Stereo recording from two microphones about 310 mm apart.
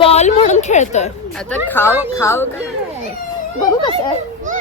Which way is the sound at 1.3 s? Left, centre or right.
Centre.